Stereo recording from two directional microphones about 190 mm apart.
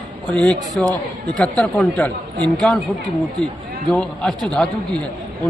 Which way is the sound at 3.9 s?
5° left (ahead or behind).